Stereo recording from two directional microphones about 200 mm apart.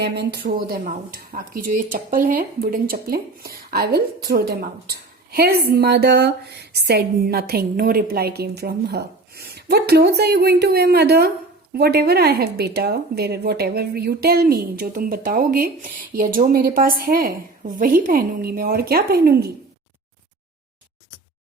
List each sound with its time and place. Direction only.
0.0 s speech: 55° right (ahead or behind)